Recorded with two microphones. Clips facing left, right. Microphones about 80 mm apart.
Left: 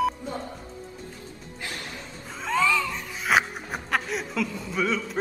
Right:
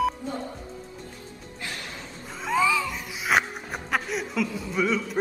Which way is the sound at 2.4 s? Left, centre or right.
Centre.